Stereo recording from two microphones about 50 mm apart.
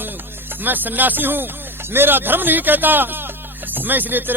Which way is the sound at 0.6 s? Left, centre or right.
Right.